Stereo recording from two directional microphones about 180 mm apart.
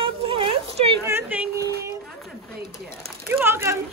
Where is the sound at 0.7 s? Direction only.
30° right (ahead or behind).